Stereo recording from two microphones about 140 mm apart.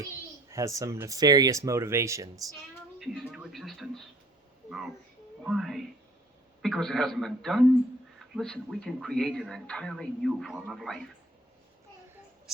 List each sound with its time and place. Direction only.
0.5 s speech: 20° right (ahead or behind)
3.0 s speech: 5° right (ahead or behind)
5.4 s speech: centre (ahead or behind)